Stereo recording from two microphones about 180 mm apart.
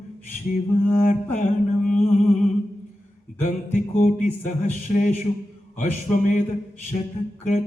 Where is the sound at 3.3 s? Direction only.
45° left (ahead or behind).